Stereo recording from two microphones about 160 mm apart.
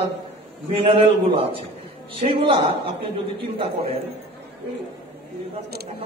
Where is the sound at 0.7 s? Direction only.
35° right (ahead or behind).